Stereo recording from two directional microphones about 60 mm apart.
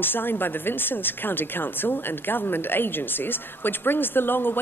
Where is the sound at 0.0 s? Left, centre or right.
Left.